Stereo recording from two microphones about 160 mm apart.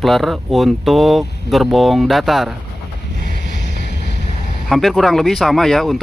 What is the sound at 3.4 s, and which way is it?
Vehicle, 90° left.